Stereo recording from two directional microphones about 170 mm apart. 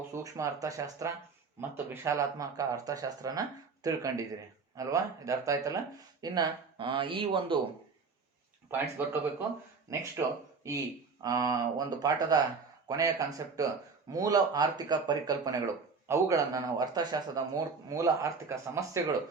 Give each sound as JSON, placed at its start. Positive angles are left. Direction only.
{"t": 0.1, "sound": "speech", "side_deg": -20}
{"t": 8.7, "sound": "speech", "side_deg": -10}
{"t": 9.9, "sound": "speech", "side_deg": -15}